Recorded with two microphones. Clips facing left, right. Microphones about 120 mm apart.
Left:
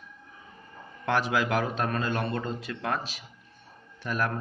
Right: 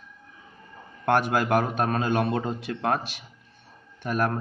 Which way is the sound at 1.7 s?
65° right (ahead or behind).